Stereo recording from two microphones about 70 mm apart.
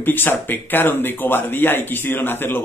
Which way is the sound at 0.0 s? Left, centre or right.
Left.